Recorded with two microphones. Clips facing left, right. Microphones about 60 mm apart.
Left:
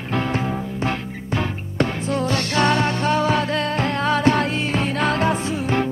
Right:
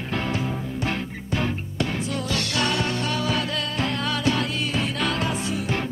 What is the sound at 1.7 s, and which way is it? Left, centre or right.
Music, left.